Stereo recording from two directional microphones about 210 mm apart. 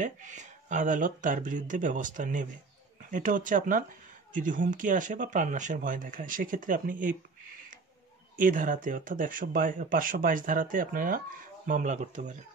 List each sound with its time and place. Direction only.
0.0 s speech: 35° right (ahead or behind)
8.4 s speech: 40° right (ahead or behind)